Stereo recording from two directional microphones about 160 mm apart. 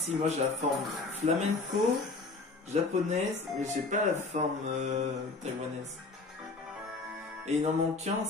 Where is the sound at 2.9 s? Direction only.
45° right (ahead or behind).